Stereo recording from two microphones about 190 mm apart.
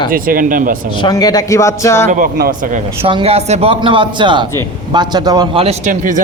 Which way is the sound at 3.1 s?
30° right (ahead or behind).